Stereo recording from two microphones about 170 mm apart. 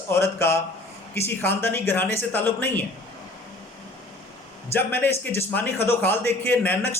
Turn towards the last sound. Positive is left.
turn(degrees=10)  # may be behind; listen again after turning